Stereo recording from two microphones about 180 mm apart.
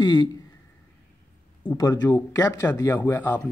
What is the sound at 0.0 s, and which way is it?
Speech, 25° left (ahead or behind).